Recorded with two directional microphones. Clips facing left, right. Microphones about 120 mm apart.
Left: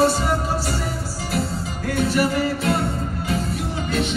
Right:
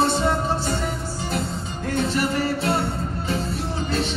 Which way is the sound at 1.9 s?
25° right (ahead or behind).